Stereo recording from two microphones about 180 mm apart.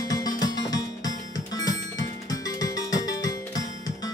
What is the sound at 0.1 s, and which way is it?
Music, 20° left (ahead or behind).